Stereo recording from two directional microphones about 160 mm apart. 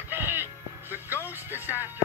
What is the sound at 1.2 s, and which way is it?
Speech, 10° right (ahead or behind).